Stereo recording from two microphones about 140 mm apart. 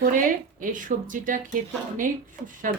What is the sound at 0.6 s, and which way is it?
Speech, 70° right (ahead or behind).